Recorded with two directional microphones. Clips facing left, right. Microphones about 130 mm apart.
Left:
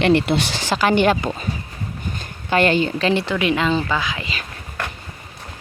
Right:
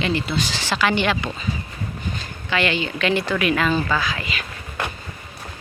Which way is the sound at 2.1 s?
45° left (ahead or behind).